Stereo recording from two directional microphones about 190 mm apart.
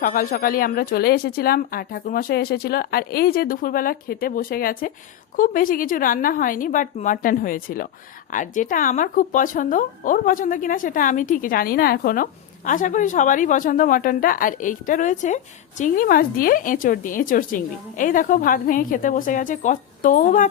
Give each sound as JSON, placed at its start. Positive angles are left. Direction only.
{"t": 0.0, "sound": "speech", "side_deg": 45}